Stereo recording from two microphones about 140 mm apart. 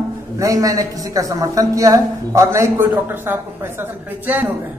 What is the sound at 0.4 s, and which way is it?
A woman's voice, 25° right (ahead or behind).